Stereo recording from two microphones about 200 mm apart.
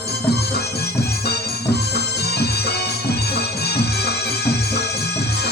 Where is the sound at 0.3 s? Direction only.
55° left (ahead or behind).